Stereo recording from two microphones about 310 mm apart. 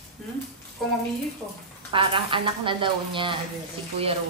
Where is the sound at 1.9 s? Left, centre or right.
Centre.